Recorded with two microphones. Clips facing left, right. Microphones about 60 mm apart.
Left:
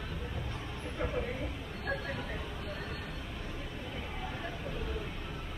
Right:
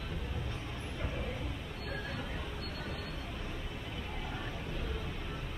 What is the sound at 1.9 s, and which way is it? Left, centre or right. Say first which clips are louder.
Vehicle: left 5 dB; left.